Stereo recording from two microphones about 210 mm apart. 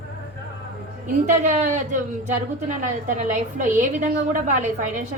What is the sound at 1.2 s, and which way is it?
A woman's voice, 35° right (ahead or behind).